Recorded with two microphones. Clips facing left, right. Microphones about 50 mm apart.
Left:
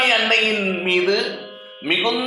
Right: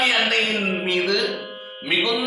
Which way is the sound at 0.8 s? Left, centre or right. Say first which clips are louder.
Left 5 dB; left.